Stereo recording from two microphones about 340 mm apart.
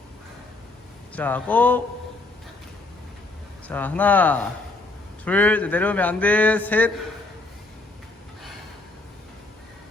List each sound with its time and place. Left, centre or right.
1.1 s a man's voice: centre
3.7 s a man's voice: centre